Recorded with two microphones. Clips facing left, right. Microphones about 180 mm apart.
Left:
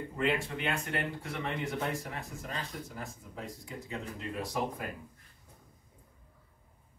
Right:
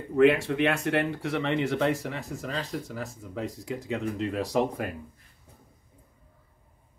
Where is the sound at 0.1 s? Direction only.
75° right (ahead or behind).